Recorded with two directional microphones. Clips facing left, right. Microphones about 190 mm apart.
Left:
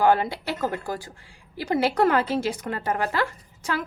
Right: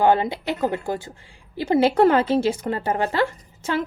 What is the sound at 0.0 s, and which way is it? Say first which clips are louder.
A woman's voice: right 2 dB; 20° right (ahead or behind).